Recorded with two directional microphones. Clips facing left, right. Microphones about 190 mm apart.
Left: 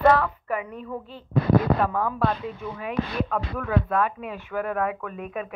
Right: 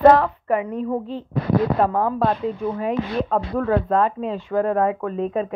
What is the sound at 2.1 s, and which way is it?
A woman's voice, 25° right (ahead or behind).